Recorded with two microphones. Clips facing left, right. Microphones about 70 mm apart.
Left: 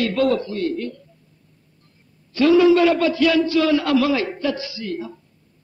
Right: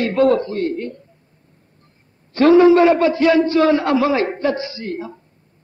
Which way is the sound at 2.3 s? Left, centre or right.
Right.